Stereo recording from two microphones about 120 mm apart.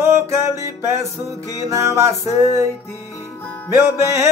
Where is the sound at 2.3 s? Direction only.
70° left (ahead or behind).